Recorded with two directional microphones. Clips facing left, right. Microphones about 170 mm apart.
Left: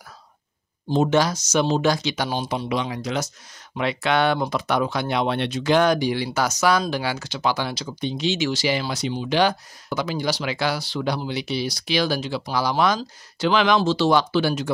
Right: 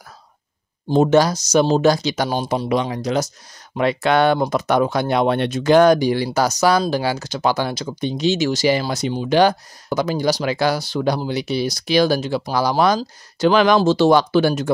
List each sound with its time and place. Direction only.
0.8 s speech: 50° right (ahead or behind)